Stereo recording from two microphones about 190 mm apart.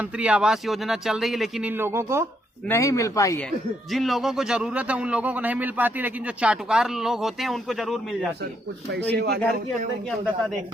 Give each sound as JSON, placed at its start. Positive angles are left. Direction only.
{"t": 0.0, "sound": "a man's voice", "side_deg": -5}
{"t": 2.6, "sound": "a man's voice", "side_deg": 15}
{"t": 3.9, "sound": "a man's voice", "side_deg": 0}
{"t": 9.1, "sound": "speech", "side_deg": -60}